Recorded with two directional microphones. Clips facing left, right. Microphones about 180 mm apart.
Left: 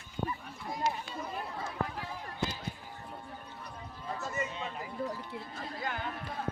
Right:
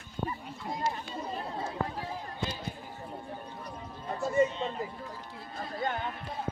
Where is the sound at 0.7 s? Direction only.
25° right (ahead or behind).